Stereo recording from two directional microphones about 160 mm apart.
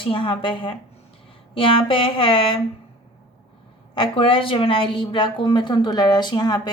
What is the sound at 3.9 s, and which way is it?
A woman's voice, 30° left (ahead or behind).